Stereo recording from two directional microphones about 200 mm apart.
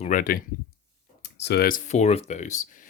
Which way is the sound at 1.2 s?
60° left (ahead or behind).